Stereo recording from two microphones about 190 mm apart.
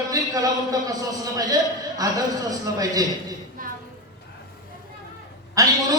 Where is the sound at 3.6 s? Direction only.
45° right (ahead or behind).